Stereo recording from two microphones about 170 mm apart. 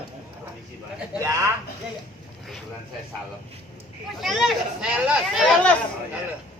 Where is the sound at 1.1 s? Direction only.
15° right (ahead or behind).